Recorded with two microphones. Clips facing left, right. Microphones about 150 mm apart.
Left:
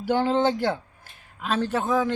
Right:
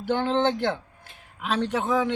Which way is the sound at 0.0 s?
10° left (ahead or behind).